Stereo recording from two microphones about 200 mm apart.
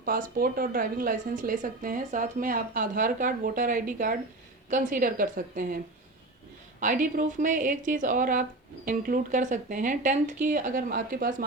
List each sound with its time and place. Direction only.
0.0 s a woman's voice: 45° right (ahead or behind)